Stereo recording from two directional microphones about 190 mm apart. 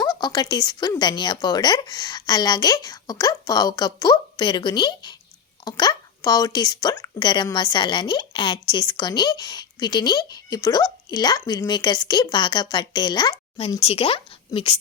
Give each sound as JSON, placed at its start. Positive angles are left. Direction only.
{"t": 0.0, "sound": "speech", "side_deg": 20}